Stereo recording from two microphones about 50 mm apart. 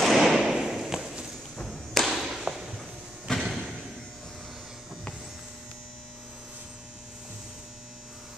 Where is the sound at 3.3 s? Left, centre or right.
Centre.